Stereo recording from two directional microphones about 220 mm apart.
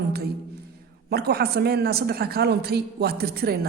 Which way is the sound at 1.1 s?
45° right (ahead or behind).